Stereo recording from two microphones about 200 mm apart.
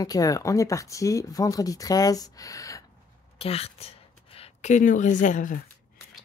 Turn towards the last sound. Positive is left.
turn(degrees=40)  # may be behind; listen again after turning